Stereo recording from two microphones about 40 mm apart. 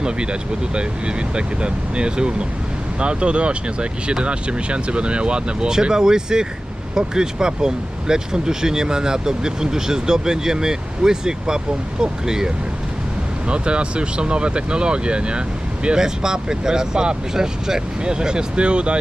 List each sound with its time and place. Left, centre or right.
0.0 s speech: right
13.5 s speech: right